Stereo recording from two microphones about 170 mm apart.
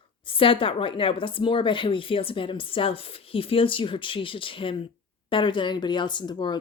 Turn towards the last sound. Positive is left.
turn(degrees=25)  # may be behind; listen again after turning